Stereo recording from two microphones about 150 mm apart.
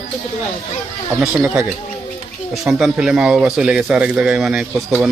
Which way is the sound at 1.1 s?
5° right (ahead or behind).